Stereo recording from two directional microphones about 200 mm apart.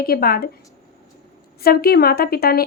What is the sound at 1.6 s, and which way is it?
A woman's voice, 50° left (ahead or behind).